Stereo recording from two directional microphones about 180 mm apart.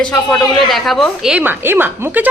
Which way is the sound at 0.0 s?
5° left (ahead or behind).